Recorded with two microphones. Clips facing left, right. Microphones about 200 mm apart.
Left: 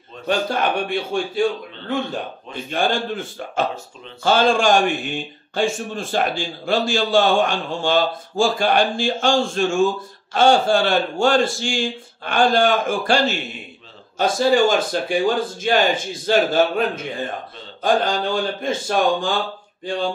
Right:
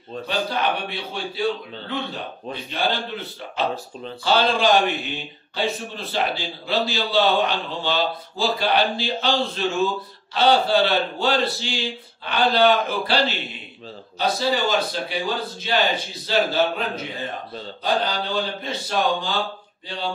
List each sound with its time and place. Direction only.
0.3 s a man's voice: 50° left (ahead or behind)